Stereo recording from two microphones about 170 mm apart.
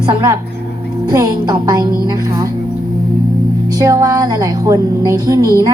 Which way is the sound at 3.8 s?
20° right (ahead or behind).